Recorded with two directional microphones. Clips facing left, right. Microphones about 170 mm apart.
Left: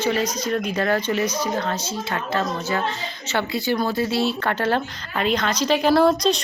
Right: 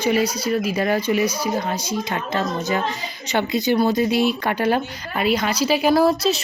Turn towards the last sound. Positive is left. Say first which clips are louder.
# even
turn(degrees=-5)  # may be behind; listen again after turning